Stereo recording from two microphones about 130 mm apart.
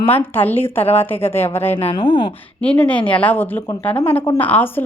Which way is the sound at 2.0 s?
40° left (ahead or behind).